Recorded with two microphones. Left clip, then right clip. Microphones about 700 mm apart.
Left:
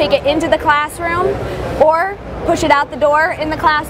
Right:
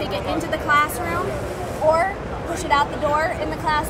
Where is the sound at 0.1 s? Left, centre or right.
Left.